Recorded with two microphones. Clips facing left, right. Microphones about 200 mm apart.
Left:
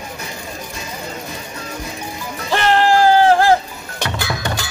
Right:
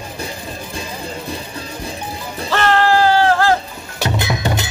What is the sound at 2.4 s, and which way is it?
Music, 15° left (ahead or behind).